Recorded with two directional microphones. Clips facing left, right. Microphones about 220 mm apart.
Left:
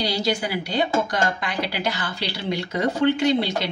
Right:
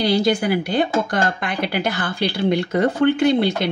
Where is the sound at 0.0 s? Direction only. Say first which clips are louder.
Right 6 dB; 55° right (ahead or behind).